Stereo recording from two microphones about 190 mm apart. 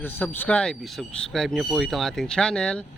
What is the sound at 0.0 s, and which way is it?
Speech, 10° left (ahead or behind).